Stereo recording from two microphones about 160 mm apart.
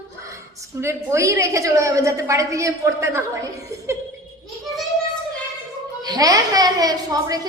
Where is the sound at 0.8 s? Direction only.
15° right (ahead or behind).